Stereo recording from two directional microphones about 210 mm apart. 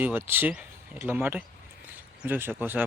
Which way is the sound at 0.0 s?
10° right (ahead or behind).